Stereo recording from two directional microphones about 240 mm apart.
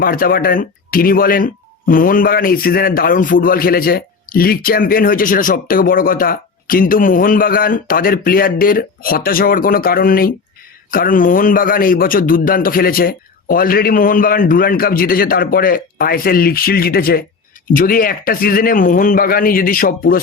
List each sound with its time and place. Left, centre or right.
0.0 s speech: left